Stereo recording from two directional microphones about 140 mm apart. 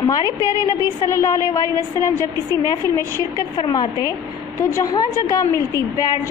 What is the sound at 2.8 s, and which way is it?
Speech, 20° left (ahead or behind).